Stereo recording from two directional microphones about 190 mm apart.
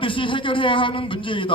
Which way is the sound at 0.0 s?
25° left (ahead or behind).